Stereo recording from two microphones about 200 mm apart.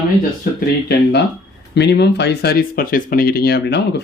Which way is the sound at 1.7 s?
55° left (ahead or behind).